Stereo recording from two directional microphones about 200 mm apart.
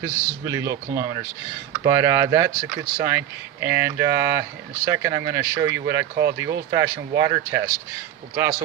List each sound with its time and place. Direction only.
0.0 s speech: 15° right (ahead or behind)